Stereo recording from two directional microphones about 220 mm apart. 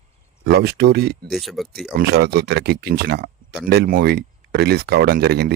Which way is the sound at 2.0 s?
45° right (ahead or behind).